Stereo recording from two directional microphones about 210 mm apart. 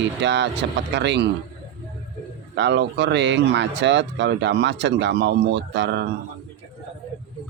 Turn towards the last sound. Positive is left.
turn(degrees=-55)  # may be behind; listen again after turning